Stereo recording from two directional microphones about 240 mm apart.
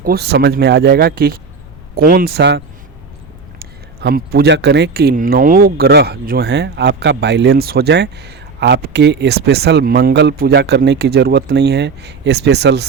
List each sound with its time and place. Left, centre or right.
0.0 s speech: right